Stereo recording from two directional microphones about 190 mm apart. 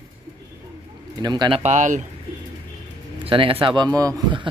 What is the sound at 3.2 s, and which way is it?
Speech, 30° right (ahead or behind).